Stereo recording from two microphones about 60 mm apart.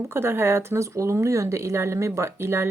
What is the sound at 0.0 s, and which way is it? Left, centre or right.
Speech, right.